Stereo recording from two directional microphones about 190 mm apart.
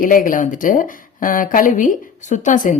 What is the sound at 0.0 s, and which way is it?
Speech, 45° left (ahead or behind).